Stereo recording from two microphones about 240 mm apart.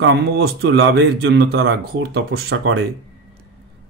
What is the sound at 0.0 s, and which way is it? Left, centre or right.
A man's voice, right.